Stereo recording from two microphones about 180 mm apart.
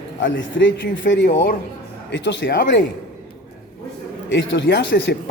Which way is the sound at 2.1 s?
85° left.